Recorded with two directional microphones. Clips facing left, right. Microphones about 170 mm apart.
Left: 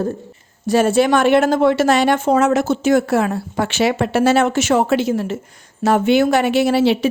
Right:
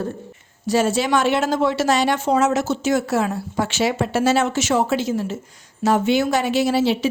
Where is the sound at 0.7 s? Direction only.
55° left (ahead or behind).